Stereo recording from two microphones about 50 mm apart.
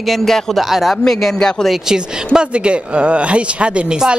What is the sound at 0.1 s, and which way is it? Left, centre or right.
Speech, centre.